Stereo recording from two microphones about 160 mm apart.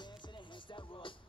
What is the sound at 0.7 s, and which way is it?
Music, 30° left (ahead or behind).